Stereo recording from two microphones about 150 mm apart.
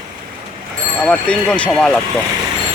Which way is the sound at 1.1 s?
5° left (ahead or behind).